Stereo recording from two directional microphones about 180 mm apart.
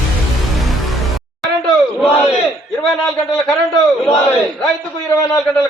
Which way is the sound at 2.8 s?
Centre (ahead or behind).